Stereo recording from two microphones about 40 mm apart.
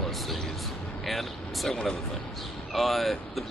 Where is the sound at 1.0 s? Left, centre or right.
Centre.